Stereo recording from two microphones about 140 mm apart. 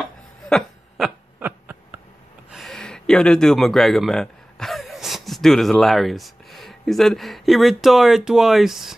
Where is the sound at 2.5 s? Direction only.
Centre (ahead or behind).